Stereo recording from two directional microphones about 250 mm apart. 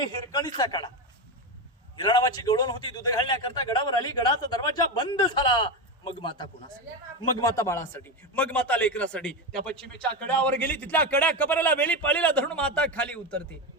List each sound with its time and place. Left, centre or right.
0.0 s a man's voice: centre
2.0 s a man's voice: centre